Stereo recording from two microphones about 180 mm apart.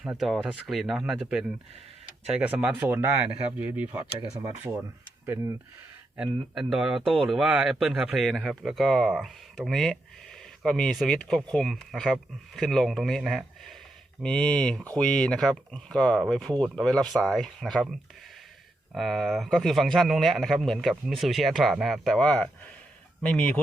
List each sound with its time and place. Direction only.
0.0 s speech: 5° right (ahead or behind)
5.2 s speech: 15° right (ahead or behind)
6.1 s speech: 5° right (ahead or behind)
18.9 s speech: centre (ahead or behind)